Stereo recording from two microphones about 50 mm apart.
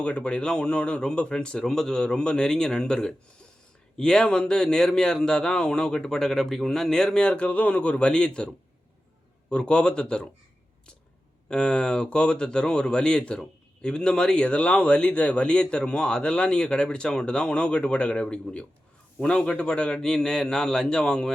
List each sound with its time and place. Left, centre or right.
0.0 s a man's voice: left
11.4 s a man's voice: centre